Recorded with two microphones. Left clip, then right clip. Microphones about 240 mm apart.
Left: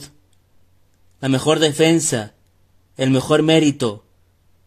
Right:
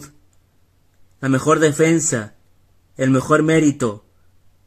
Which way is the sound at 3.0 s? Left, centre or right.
Centre.